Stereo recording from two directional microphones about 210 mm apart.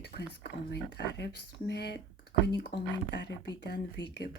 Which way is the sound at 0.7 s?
55° left (ahead or behind).